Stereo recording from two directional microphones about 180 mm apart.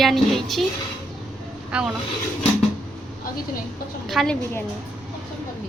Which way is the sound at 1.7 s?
5° right (ahead or behind).